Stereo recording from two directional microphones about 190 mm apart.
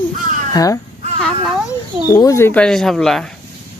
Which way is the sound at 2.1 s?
15° left (ahead or behind).